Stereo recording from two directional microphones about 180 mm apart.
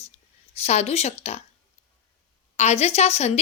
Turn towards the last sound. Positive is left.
turn(degrees=35)  # may be behind; listen again after turning